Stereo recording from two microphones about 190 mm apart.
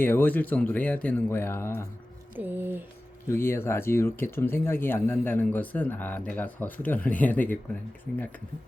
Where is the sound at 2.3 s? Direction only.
10° right (ahead or behind).